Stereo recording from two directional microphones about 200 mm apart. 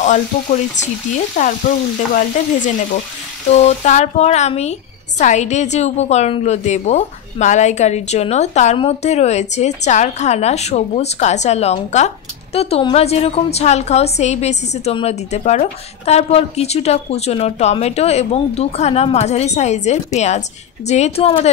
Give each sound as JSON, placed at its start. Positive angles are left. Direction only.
{"t": 0.0, "sound": "a woman's voice", "side_deg": 35}
{"t": 2.1, "sound": "a woman's voice", "side_deg": 40}